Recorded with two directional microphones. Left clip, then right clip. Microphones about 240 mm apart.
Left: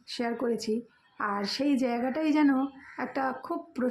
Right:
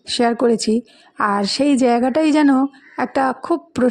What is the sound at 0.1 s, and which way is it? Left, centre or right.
Speech, right.